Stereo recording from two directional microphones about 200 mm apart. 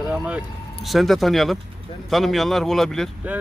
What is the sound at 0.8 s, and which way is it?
A man's voice, centre (ahead or behind).